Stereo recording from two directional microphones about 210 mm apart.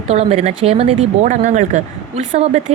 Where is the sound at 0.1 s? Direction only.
30° right (ahead or behind).